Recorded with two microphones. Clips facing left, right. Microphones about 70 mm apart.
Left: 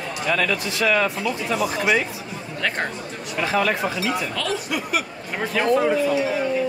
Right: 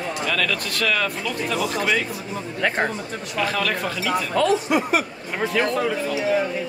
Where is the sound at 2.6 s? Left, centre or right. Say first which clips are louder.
Right 3 dB; centre.